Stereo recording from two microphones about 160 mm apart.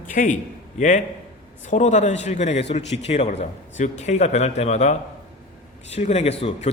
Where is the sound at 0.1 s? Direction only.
55° left (ahead or behind).